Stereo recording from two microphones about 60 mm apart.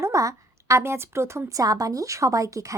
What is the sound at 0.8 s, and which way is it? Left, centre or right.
Speech, right.